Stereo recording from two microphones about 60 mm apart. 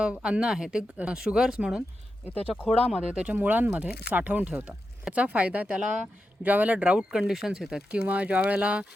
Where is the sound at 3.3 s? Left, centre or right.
Right.